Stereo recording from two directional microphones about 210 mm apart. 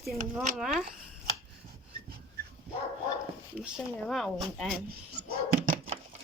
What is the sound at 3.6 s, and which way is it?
Speech, centre (ahead or behind).